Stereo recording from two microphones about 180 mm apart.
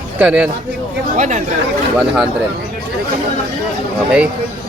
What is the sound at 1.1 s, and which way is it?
Speech, 45° right (ahead or behind).